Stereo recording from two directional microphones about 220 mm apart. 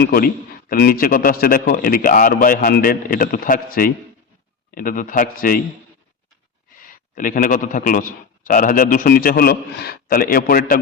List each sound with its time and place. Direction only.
0.0 s a man's voice: 45° left (ahead or behind)
6.7 s a man's voice: 40° left (ahead or behind)